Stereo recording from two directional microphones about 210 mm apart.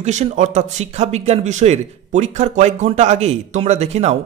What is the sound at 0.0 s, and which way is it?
Speech, 35° right (ahead or behind).